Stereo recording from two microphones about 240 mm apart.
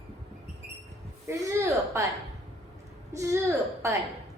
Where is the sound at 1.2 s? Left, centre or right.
Centre.